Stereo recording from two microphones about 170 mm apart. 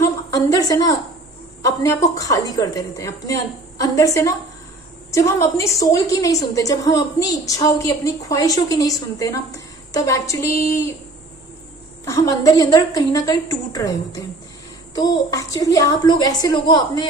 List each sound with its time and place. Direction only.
0.0 s a sound: 20° left (ahead or behind)
1.6 s a woman's voice: 20° left (ahead or behind)
12.3 s a woman's voice: 20° left (ahead or behind)